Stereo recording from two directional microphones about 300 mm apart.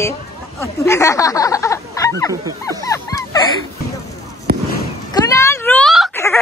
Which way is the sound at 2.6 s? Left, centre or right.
Centre.